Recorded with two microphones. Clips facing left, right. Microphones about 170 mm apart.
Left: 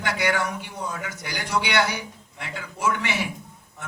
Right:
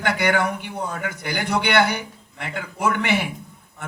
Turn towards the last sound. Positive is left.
turn(degrees=-55)  # may be behind; listen again after turning